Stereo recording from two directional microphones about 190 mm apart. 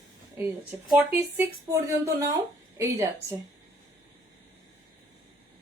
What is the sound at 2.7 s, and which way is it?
Speech, 15° right (ahead or behind).